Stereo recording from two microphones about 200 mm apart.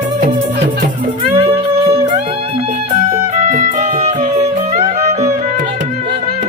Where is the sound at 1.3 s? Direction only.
30° right (ahead or behind).